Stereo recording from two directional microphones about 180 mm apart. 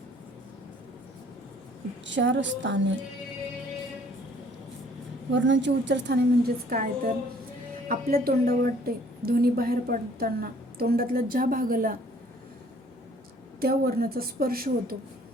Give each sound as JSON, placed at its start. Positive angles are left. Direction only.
{"t": 2.0, "sound": "a woman's voice", "side_deg": -90}
{"t": 5.3, "sound": "a woman's voice", "side_deg": -90}
{"t": 13.6, "sound": "a woman's voice", "side_deg": -55}